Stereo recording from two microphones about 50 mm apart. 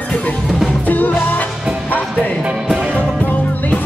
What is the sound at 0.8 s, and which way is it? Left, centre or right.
Music, left.